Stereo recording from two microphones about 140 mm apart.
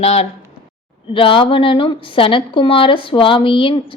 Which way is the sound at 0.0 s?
50° left (ahead or behind).